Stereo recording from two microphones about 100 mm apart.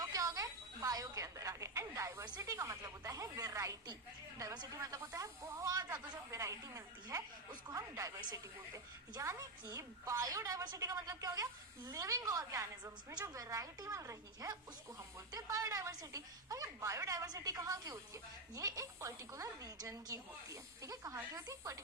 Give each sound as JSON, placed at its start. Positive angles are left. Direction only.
{"t": 0.0, "sound": "a woman's voice", "side_deg": -35}